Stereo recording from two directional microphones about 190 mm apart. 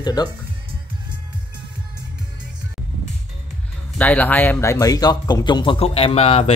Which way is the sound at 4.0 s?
10° left (ahead or behind).